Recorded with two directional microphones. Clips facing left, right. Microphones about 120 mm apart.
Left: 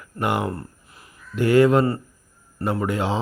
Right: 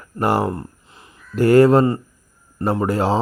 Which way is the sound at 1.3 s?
40° right (ahead or behind).